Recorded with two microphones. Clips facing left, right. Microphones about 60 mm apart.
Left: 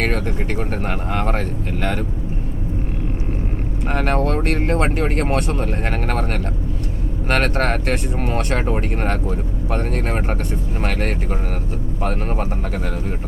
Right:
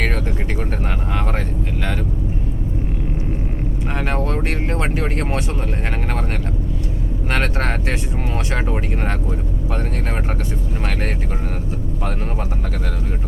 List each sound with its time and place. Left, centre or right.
0.8 s vehicle: left
3.9 s speech: left
7.3 s speech: left